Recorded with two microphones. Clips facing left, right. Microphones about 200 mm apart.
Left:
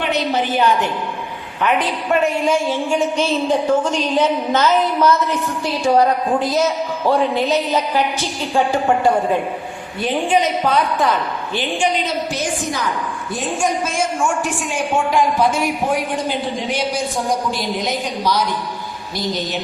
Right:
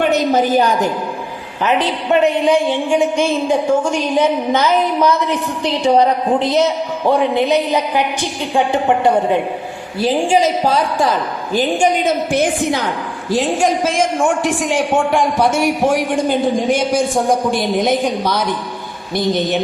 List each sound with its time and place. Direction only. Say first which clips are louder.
0.0 s a woman's voice: right 5 dB; 45° right (ahead or behind)
1.6 s a woman's voice: right 2 dB; 25° right (ahead or behind); by 12.9 s 60° right (ahead or behind)
14.9 s speech: left 1 dB; 70° right (ahead or behind)
16.1 s a woman's voice: right 6 dB; 50° right (ahead or behind)
19.1 s a sound: right 7 dB; 55° right (ahead or behind)